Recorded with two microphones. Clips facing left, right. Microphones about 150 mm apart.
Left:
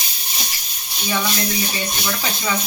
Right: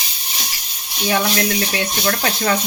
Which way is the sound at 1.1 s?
75° right (ahead or behind).